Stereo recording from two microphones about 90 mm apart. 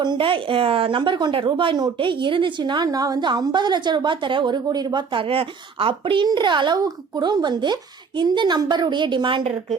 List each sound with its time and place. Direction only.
0.0 s a woman's voice: 65° right (ahead or behind)
5.3 s speech: 90° right; by 6.2 s 70° right (ahead or behind)
6.2 s a woman's voice: 55° right (ahead or behind)